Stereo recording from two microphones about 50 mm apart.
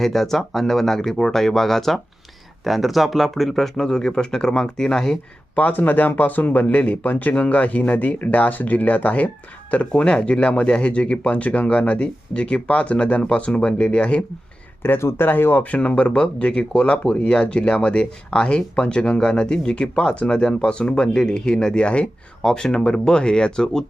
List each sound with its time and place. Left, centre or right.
0.0 s speech: centre
5.5 s speech: left
14.8 s speech: left
15.6 s speech: left